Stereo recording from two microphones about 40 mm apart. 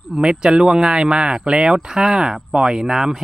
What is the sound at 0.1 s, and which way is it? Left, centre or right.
Speech, centre.